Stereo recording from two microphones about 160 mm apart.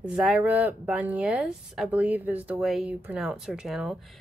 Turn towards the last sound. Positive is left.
turn(degrees=0)  # may be behind; listen again after turning